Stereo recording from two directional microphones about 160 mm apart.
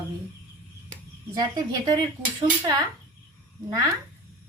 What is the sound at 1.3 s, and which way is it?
Speech, 25° right (ahead or behind).